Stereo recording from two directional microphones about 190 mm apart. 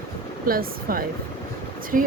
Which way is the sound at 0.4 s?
50° right (ahead or behind).